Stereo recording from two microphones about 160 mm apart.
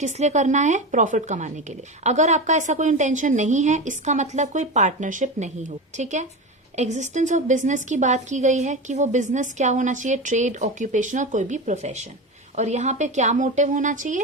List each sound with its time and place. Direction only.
0.0 s a woman's voice: 45° right (ahead or behind)